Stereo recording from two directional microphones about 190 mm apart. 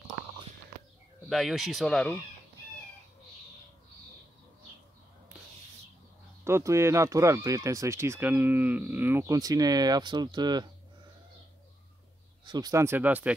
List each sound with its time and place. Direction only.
1.3 s speech: centre (ahead or behind)
6.4 s speech: 15° right (ahead or behind)
12.4 s speech: 20° right (ahead or behind)